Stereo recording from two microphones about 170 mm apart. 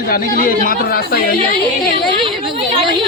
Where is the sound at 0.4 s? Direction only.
55° left (ahead or behind).